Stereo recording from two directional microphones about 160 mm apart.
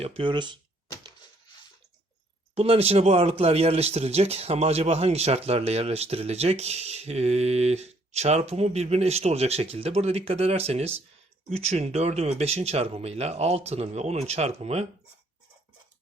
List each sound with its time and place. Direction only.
0.0 s speech: 35° right (ahead or behind)
2.6 s speech: 40° right (ahead or behind)